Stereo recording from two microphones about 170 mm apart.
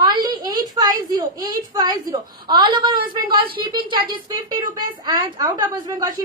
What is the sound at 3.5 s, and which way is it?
A woman's voice, 30° right (ahead or behind).